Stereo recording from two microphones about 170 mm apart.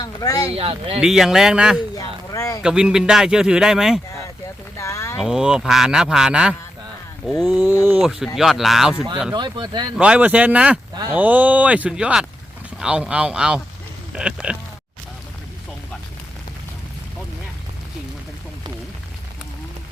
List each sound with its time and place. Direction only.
0.0 s speech: 20° left (ahead or behind)
0.5 s speech: 35° right (ahead or behind)
1.0 s speech: centre (ahead or behind)
2.0 s a sound: 20° left (ahead or behind)
2.6 s speech: 5° right (ahead or behind)
4.8 s a sound: 15° left (ahead or behind)
5.1 s speech: centre (ahead or behind)
9.3 s speech: 25° right (ahead or behind)
10.0 s speech: 5° right (ahead or behind)